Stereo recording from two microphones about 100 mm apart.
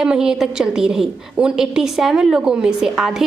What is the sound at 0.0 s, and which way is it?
A woman's voice, 5° right (ahead or behind).